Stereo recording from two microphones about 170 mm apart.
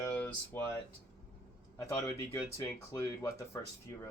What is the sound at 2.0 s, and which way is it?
Speech, 20° left (ahead or behind).